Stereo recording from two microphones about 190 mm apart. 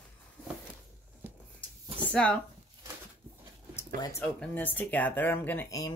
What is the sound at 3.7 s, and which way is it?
Speech, 10° left (ahead or behind).